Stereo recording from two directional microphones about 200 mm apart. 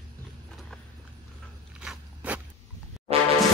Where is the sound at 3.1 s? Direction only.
30° right (ahead or behind).